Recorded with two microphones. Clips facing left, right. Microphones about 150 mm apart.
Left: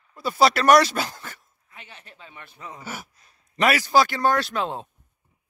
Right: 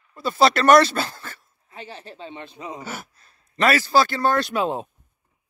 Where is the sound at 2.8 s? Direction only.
15° left (ahead or behind).